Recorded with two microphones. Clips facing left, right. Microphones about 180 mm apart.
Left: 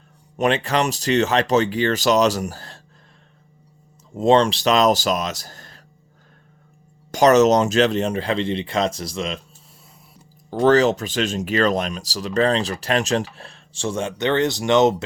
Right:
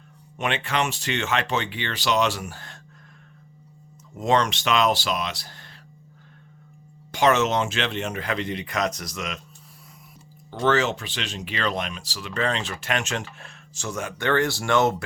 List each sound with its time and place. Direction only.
0.3 s speech: 40° left (ahead or behind)
4.1 s speech: 30° left (ahead or behind)
7.1 s speech: 40° left (ahead or behind)
10.5 s speech: 35° left (ahead or behind); by 15.0 s 20° left (ahead or behind)